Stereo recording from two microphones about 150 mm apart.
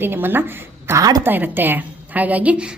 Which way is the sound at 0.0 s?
15° right (ahead or behind).